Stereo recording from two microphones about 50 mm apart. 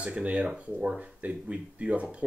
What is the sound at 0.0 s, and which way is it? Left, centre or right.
Speech, right.